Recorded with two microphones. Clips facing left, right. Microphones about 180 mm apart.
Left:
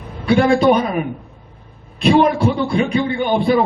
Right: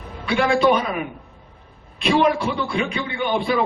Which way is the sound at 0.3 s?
45° left (ahead or behind).